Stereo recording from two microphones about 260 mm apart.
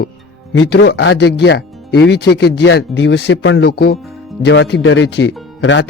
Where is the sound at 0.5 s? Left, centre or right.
Left.